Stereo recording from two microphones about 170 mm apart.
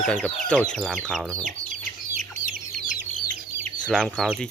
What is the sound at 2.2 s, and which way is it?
Chicken, 45° right (ahead or behind).